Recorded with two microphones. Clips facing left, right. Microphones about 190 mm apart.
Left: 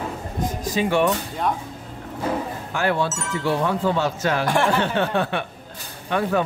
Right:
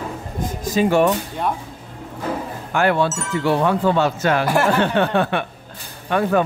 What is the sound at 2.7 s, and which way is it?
Speech, 65° right (ahead or behind).